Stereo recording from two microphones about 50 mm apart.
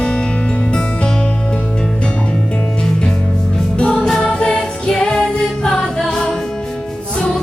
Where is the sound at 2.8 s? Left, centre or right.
Centre.